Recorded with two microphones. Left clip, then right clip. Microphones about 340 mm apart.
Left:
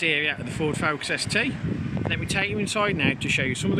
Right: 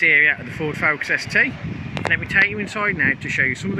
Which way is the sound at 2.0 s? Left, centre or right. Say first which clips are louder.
Right 9 dB; right.